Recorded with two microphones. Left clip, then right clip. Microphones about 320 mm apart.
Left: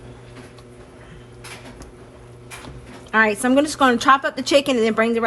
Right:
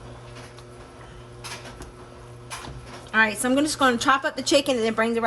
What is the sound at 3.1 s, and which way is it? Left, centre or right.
A woman's voice, centre.